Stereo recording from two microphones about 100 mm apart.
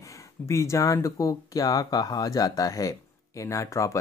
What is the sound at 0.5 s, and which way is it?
Speech, 30° left (ahead or behind).